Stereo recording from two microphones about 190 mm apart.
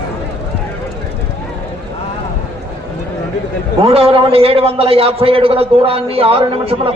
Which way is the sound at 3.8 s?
30° right (ahead or behind).